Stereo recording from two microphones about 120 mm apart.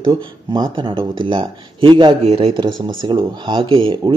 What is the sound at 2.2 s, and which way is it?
Speech, 55° right (ahead or behind).